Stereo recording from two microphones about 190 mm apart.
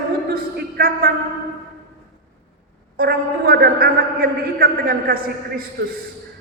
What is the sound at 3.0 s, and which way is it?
A man's voice, 50° right (ahead or behind).